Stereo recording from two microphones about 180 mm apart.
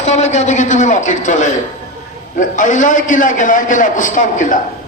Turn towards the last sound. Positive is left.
turn(degrees=45)  # may be behind; listen again after turning